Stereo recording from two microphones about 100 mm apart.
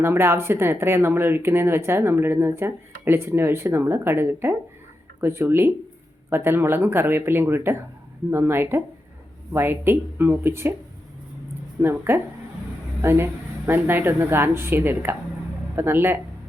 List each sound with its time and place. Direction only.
0.0 s speech: 25° right (ahead or behind)
11.8 s speech: 20° right (ahead or behind)